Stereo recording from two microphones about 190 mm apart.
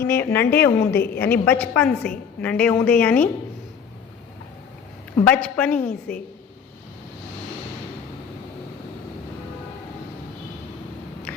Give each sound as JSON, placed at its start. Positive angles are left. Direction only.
{"t": 0.1, "sound": "a woman's voice", "side_deg": 10}
{"t": 0.9, "sound": "a woman's voice", "side_deg": 55}
{"t": 1.2, "sound": "a woman's voice", "side_deg": 10}
{"t": 5.2, "sound": "a woman's voice", "side_deg": 5}